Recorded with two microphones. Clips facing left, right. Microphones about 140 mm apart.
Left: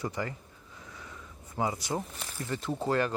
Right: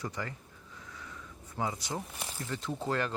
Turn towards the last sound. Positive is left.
turn(degrees=5)  # may be behind; listen again after turning